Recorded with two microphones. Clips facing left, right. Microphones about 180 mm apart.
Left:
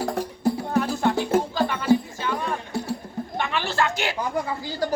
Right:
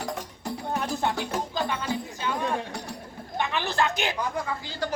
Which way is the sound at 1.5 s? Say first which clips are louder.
Left 8 dB; 20° right (ahead or behind).